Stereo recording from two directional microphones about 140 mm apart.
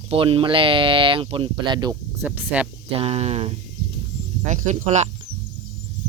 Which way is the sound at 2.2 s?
10° right (ahead or behind).